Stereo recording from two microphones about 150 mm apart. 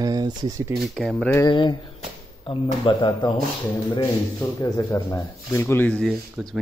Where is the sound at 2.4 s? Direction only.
35° left (ahead or behind).